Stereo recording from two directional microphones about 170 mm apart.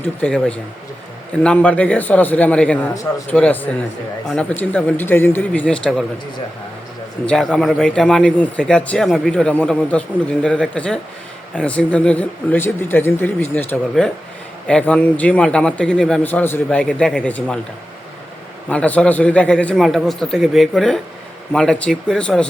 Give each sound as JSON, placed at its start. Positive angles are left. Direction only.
{"t": 0.0, "sound": "a man's voice", "side_deg": 5}
{"t": 2.9, "sound": "a man's voice", "side_deg": 20}
{"t": 3.2, "sound": "a man's voice", "side_deg": 10}
{"t": 7.3, "sound": "a man's voice", "side_deg": 5}
{"t": 18.7, "sound": "a man's voice", "side_deg": 10}